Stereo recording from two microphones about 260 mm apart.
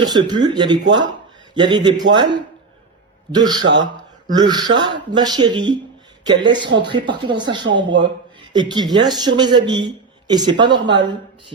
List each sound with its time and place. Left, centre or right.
0.0 s speech: centre
7.6 s speech: right
7.9 s speech: centre